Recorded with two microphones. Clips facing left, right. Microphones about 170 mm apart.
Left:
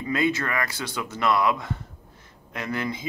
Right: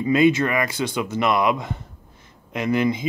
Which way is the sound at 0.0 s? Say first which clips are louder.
Right 8 dB; 20° right (ahead or behind).